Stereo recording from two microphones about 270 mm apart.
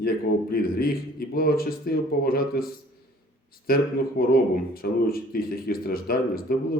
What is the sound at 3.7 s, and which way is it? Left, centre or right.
Speech, left.